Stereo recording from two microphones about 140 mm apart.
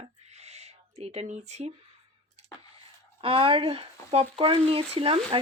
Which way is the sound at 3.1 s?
40° right (ahead or behind).